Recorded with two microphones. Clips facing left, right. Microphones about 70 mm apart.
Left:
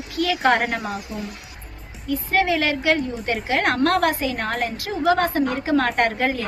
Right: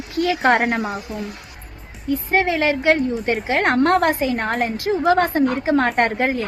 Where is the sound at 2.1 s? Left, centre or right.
Right.